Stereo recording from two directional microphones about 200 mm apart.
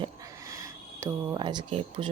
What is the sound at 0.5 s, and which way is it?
Speech, 15° right (ahead or behind).